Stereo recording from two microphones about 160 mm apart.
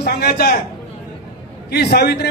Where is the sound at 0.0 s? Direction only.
70° left (ahead or behind).